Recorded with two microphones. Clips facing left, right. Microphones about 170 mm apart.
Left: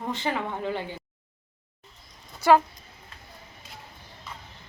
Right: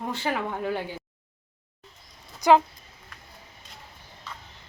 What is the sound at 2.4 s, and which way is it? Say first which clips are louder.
Speech: even; 15° right (ahead or behind).